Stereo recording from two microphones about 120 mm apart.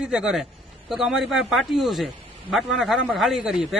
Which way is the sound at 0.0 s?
5° right (ahead or behind).